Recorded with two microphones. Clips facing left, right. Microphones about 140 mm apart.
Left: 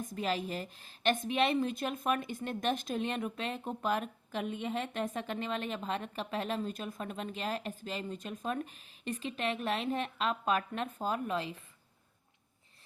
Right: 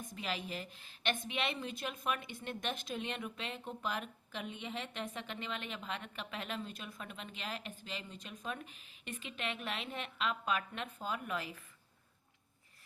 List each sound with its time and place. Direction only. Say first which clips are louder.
0.1 s a woman's voice: left 6 dB; 45° left (ahead or behind)
11.3 s a woman's voice: left 5 dB; 25° left (ahead or behind)